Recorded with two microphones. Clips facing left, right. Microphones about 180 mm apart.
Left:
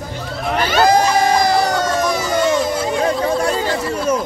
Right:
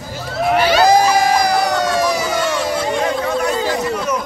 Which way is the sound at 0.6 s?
50° left (ahead or behind).